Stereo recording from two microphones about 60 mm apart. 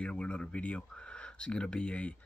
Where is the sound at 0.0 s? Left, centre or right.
Centre.